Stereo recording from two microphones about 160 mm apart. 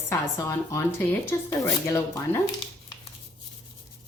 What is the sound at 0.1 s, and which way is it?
Speech, 20° left (ahead or behind).